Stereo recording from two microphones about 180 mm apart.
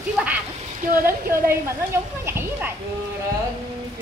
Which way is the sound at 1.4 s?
15° right (ahead or behind).